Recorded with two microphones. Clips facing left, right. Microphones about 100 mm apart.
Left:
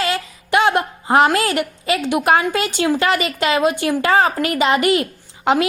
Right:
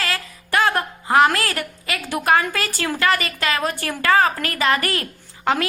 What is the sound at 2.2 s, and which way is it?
A woman's voice, 25° left (ahead or behind).